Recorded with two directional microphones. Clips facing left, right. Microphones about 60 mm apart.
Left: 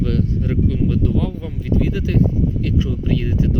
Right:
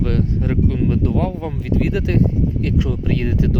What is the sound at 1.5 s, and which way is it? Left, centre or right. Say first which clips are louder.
Speech: right 1 dB; right.